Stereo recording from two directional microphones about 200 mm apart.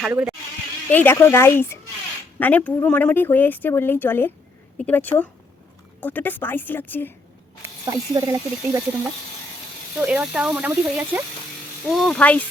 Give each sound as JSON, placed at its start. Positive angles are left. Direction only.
{"t": 0.0, "sound": "speech", "side_deg": -5}
{"t": 0.9, "sound": "speech", "side_deg": 10}
{"t": 7.9, "sound": "speech", "side_deg": -15}
{"t": 10.0, "sound": "speech", "side_deg": -5}